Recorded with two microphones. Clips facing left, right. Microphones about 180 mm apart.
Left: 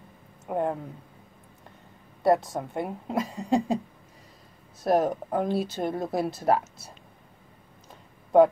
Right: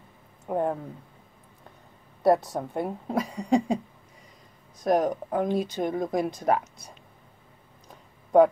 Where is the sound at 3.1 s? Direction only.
20° left (ahead or behind).